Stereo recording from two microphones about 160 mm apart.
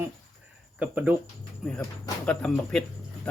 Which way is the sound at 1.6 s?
5° left (ahead or behind).